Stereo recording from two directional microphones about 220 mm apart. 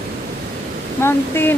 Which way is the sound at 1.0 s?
10° left (ahead or behind).